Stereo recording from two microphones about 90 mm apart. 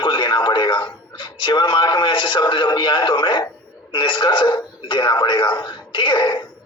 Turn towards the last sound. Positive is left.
turn(degrees=60)  # may be behind; listen again after turning